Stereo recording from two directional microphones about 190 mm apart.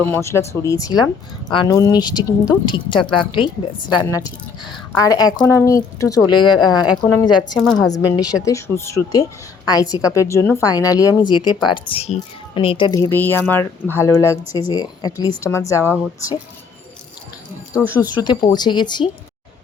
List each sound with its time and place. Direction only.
0.0 s speech: 10° left (ahead or behind)
7.5 s a woman's voice: centre (ahead or behind)
8.1 s speech: 20° left (ahead or behind)
17.8 s speech: 10° right (ahead or behind)
18.2 s speech: 20° left (ahead or behind)